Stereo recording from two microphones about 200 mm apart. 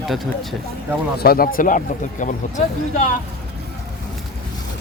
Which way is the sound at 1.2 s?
50° left (ahead or behind).